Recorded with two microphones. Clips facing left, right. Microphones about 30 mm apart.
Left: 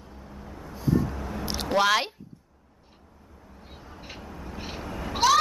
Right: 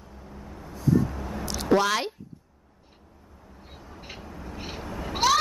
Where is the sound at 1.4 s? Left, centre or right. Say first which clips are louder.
Left 2 dB; left.